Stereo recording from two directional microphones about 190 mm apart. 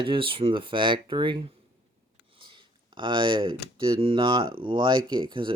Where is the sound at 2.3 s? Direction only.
25° right (ahead or behind).